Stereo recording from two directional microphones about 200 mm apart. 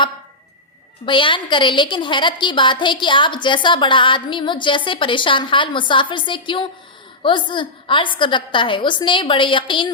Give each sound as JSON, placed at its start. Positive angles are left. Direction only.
{"t": 1.0, "sound": "a woman's voice", "side_deg": 25}